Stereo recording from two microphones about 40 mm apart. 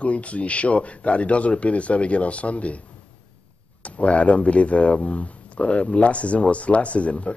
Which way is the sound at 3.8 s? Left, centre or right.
Left.